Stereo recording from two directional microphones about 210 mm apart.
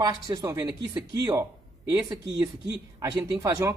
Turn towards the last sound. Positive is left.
turn(degrees=-15)  # may be behind; listen again after turning